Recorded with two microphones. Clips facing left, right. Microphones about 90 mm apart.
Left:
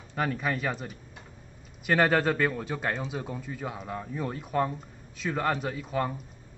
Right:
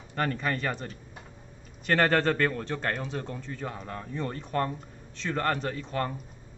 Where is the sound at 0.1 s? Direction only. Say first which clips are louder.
Even; 5° left (ahead or behind).